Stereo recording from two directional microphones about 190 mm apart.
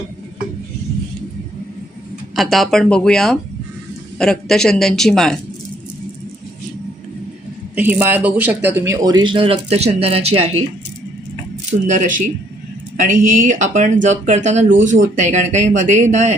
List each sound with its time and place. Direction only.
2.3 s speech: centre (ahead or behind)
7.8 s speech: 10° right (ahead or behind); by 10.6 s 35° right (ahead or behind)
11.9 s speech: 40° right (ahead or behind)